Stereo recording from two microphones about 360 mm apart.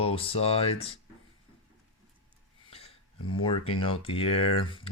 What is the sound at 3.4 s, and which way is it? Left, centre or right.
Speech, centre.